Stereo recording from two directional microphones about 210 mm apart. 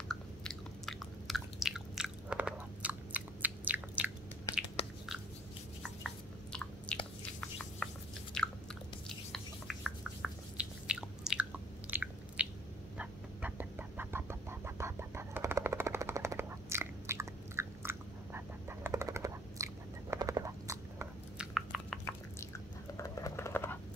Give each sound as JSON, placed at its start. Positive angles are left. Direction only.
{"t": 0.1, "sound": "chewing", "side_deg": 0}
{"t": 4.8, "sound": "biting", "side_deg": 30}
{"t": 5.8, "sound": "a sound", "side_deg": 0}
{"t": 8.4, "sound": "chewing", "side_deg": 5}
{"t": 10.2, "sound": "chewing", "side_deg": -5}
{"t": 11.9, "sound": "biting", "side_deg": -5}
{"t": 12.9, "sound": "a sound", "side_deg": -5}
{"t": 21.5, "sound": "a sound", "side_deg": 0}
{"t": 22.9, "sound": "typing", "side_deg": 15}